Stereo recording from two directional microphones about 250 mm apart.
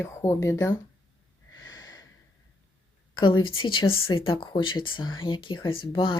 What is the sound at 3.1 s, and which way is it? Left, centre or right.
Speech, centre.